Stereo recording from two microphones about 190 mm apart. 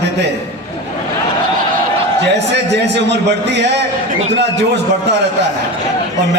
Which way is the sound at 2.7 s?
65° right (ahead or behind).